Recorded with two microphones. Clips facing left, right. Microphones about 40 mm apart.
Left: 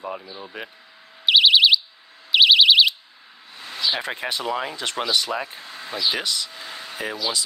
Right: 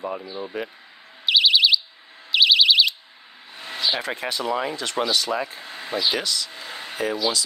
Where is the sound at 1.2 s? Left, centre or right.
Left.